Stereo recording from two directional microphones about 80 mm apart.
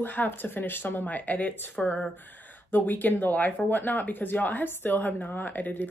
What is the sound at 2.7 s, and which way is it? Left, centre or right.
Speech, left.